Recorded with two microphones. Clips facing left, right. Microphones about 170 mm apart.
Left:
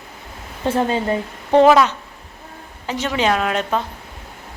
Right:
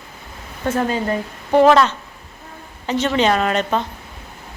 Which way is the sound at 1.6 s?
5° left (ahead or behind).